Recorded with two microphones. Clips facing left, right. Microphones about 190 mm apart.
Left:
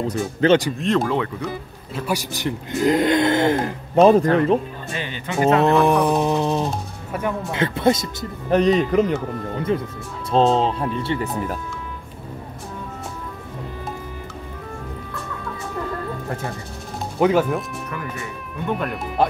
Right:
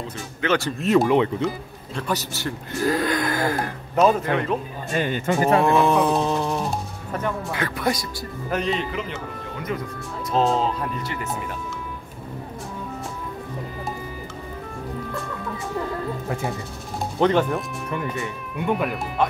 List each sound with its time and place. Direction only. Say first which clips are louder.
0.0 s speech: left 9 dB; 40° left (ahead or behind)
0.7 s speech: right 2 dB; 10° right (ahead or behind)
1.1 s speech: right 4 dB; 20° right (ahead or behind)
2.0 s speech: left 2 dB; 10° left (ahead or behind); by 4.6 s 35° left (ahead or behind)
4.9 s speech: right 7 dB; 45° right (ahead or behind)
5.4 s speech: left 3 dB; 20° left (ahead or behind)
5.9 s music: left 2 dB; 15° left (ahead or behind)
7.1 s music: left 2 dB; 10° left (ahead or behind)
7.5 s speech: left 9 dB; 25° left (ahead or behind)
8.5 s speech: left 10 dB; 40° left (ahead or behind)
17.2 s speech: left 2 dB; 5° left (ahead or behind)
18.7 s speech: right 1 dB; 5° right (ahead or behind)